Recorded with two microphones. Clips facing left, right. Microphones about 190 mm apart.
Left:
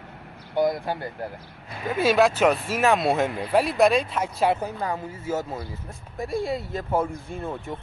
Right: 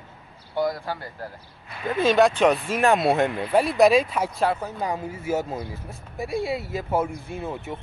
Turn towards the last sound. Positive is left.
turn(degrees=-5)  # may be behind; listen again after turning